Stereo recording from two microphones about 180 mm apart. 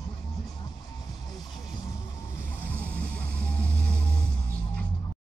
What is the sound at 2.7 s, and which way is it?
Music, 10° left (ahead or behind).